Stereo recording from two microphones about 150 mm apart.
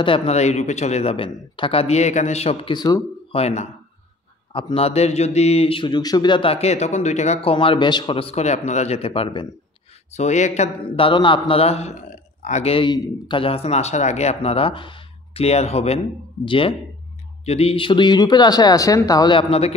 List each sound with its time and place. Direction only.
0.0 s a man's voice: 40° left (ahead or behind)
2.7 s speech: 30° left (ahead or behind)
3.3 s a man's voice: 45° left (ahead or behind)
7.5 s a man's voice: 35° left (ahead or behind)
10.1 s a man's voice: 50° left (ahead or behind)
10.9 s a man's voice: 35° left (ahead or behind)
12.1 s a man's voice: 55° left (ahead or behind); by 19.7 s 40° left (ahead or behind)